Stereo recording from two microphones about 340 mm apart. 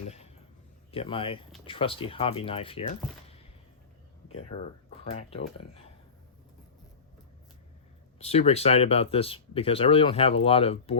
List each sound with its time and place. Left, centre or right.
0.9 s speech: centre
8.2 s speech: centre